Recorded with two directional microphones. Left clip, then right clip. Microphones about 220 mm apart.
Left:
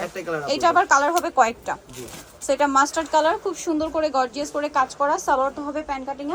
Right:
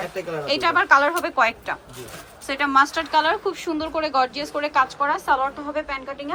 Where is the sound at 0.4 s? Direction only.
20° left (ahead or behind).